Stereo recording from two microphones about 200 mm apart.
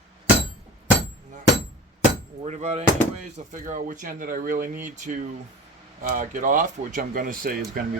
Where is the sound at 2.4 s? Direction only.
35° right (ahead or behind).